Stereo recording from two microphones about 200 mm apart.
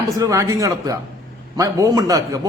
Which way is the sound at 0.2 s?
15° right (ahead or behind).